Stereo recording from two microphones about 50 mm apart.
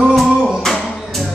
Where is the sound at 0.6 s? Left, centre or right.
Centre.